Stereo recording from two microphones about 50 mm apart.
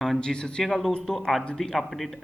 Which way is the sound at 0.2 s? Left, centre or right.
Centre.